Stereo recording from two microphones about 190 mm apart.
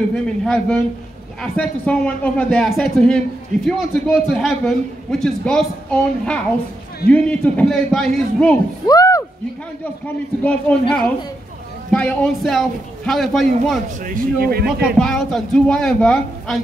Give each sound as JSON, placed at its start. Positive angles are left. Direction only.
{"t": 0.1, "sound": "a man's voice", "side_deg": 5}
{"t": 8.8, "sound": "speech", "side_deg": 20}
{"t": 10.4, "sound": "a man's voice", "side_deg": 5}
{"t": 14.0, "sound": "a man's voice", "side_deg": -50}
{"t": 15.0, "sound": "a man's voice", "side_deg": 5}